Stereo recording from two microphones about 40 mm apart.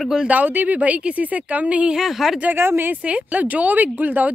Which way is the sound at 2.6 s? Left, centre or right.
Right.